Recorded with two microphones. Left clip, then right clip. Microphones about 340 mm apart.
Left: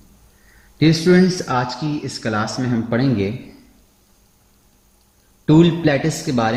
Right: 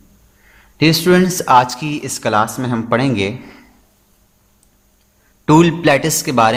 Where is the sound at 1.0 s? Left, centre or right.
Right.